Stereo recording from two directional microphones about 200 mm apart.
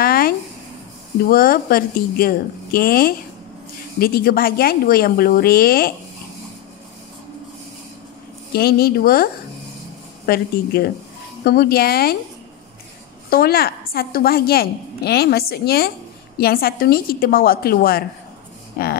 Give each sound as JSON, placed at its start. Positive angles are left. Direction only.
{"t": 0.0, "sound": "a sound", "side_deg": 45}
{"t": 1.2, "sound": "a woman's voice", "side_deg": 45}
{"t": 8.5, "sound": "a woman's voice", "side_deg": 50}
{"t": 13.3, "sound": "a woman's voice", "side_deg": 50}